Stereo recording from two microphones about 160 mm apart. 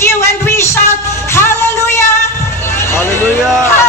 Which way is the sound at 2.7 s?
15° left (ahead or behind).